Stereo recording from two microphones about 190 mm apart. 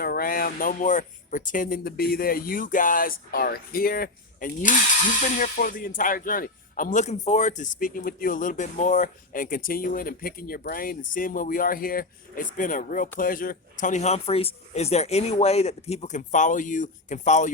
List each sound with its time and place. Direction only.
0.0 s speech: 50° left (ahead or behind)